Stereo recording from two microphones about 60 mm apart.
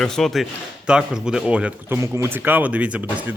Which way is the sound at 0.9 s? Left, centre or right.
Centre.